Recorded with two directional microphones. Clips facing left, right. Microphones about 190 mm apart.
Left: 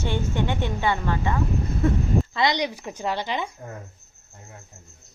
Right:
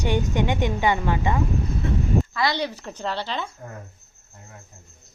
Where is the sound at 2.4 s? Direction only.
20° left (ahead or behind).